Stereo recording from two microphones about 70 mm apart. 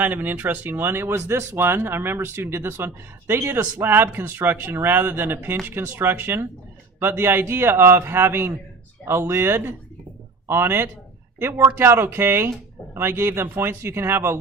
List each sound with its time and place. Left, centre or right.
0.0 s speech: right